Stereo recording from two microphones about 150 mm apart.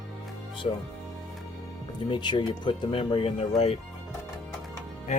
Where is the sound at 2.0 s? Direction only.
30° left (ahead or behind).